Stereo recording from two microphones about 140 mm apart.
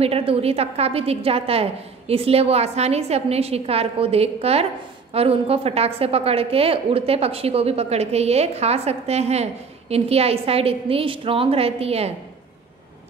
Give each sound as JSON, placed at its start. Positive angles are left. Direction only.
{"t": 0.0, "sound": "a woman's voice", "side_deg": -45}